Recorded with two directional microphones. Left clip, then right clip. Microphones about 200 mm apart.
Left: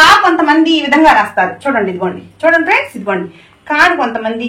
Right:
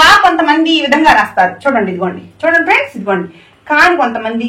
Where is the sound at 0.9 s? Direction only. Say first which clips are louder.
Left 1 dB; 25° right (ahead or behind).